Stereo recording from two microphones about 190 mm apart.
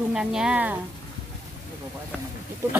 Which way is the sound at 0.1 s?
5° right (ahead or behind).